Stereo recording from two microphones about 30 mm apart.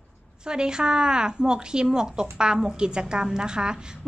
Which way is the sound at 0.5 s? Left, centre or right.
Right.